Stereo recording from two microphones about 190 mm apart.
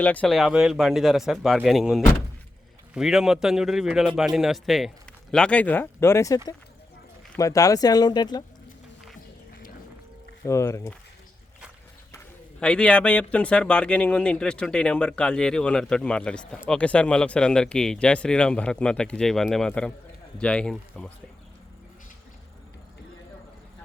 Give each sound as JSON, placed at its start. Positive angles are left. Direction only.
{"t": 0.0, "sound": "a man's voice", "side_deg": 5}
{"t": 10.4, "sound": "speech", "side_deg": 15}
{"t": 12.1, "sound": "a man's voice", "side_deg": 5}